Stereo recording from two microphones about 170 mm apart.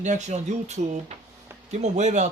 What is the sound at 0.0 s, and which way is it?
Speech, 45° right (ahead or behind).